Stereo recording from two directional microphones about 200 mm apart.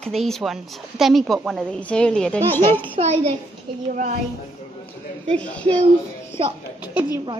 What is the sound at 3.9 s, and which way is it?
Speech, 45° right (ahead or behind).